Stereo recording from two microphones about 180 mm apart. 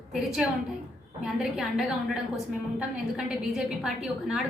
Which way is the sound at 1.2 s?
Centre (ahead or behind).